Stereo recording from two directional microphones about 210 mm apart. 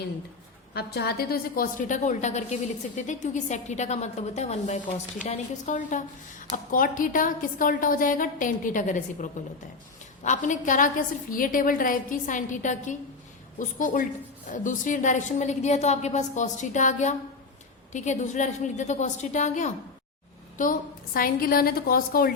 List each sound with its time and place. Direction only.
0.7 s a woman's voice: 50° left (ahead or behind)